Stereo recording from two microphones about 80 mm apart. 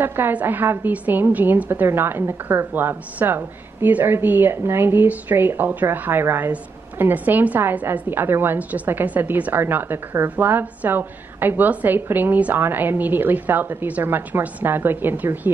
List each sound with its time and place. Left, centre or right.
0.0 s a woman's voice: right